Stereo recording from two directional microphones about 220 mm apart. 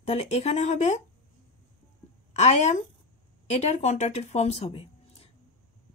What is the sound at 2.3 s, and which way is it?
Speech, 30° left (ahead or behind).